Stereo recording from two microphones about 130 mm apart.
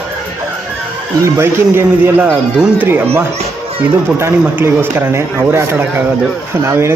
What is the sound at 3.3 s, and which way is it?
Music, 45° right (ahead or behind).